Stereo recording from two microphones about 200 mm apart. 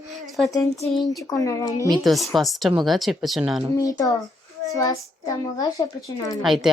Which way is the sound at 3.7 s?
15° left (ahead or behind).